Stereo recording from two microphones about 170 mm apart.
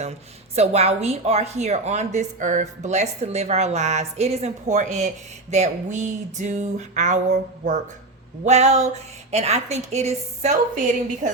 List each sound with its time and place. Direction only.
0.0 s speech: 40° right (ahead or behind)